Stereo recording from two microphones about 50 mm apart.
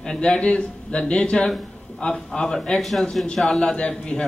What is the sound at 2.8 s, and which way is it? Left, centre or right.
A man's voice, centre.